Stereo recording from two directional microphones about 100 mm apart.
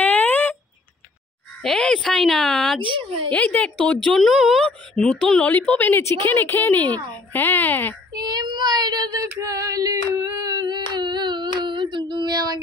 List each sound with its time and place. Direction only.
0.0 s a sound: 15° left (ahead or behind)
1.6 s a woman's voice: 5° left (ahead or behind)
8.2 s child singing: 45° right (ahead or behind)
9.4 s female singing: 35° right (ahead or behind)